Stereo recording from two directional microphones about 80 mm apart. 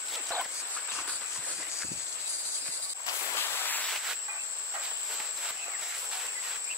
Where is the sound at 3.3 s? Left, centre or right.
Left.